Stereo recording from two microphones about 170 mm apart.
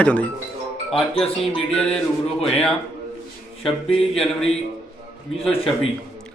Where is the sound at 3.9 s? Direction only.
5° left (ahead or behind).